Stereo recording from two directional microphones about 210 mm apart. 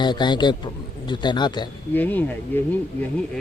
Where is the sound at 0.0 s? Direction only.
20° left (ahead or behind).